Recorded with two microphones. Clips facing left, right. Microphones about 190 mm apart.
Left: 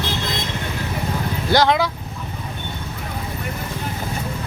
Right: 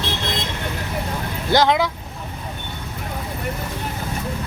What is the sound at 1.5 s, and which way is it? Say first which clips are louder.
Speech: even; 20° right (ahead or behind).